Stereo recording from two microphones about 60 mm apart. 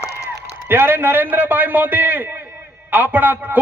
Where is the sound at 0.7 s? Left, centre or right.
Right.